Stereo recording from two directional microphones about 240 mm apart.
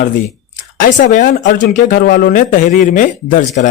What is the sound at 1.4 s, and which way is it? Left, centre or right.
Speech, left.